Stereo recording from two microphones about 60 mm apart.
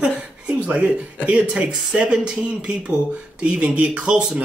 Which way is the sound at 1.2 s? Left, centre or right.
Centre.